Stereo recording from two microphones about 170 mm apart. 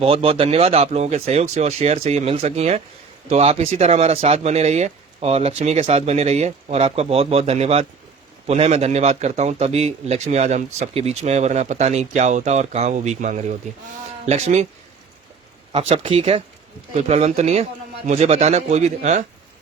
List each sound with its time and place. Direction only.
0.0 s a man's voice: 35° right (ahead or behind)
15.7 s a man's voice: 35° right (ahead or behind)